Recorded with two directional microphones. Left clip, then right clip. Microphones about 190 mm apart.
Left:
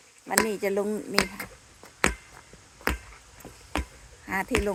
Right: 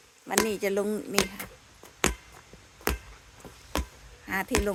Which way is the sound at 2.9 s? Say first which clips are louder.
Left 2 dB; 70° right (ahead or behind).